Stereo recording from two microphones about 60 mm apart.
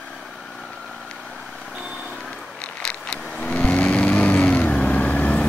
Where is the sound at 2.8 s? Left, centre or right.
Centre.